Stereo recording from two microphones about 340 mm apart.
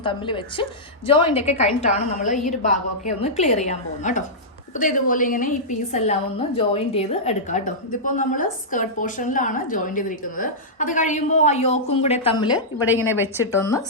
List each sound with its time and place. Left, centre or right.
0.0 s a woman's voice: centre
12.5 s a woman's voice: centre
13.6 s speech: centre